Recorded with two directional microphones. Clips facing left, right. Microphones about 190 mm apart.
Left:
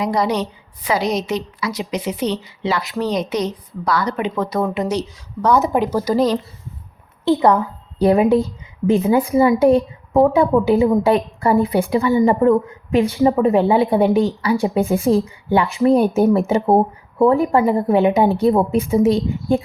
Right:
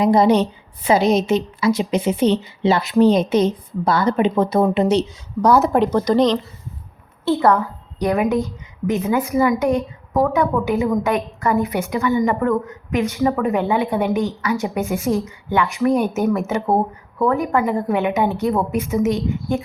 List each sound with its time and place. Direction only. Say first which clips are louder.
0.0 s a woman's voice: right 5 dB; 25° right (ahead or behind)
5.5 s speech: right 1 dB; centre (ahead or behind)
7.3 s a woman's voice: left 2 dB; 15° left (ahead or behind)
7.9 s speech: left 5 dB; 30° left (ahead or behind)